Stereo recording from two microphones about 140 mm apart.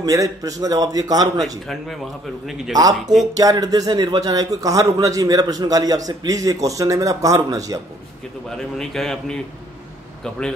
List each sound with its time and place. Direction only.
0.0 s a man's voice: 25° right (ahead or behind)
2.7 s a man's voice: 25° right (ahead or behind)
8.5 s a man's voice: 5° left (ahead or behind)